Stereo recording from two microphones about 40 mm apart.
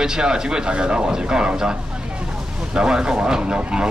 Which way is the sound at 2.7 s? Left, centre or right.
Right.